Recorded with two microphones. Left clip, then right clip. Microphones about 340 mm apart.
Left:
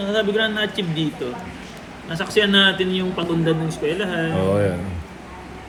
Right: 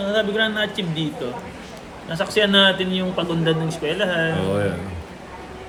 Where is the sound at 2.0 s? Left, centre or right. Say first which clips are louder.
Even; centre.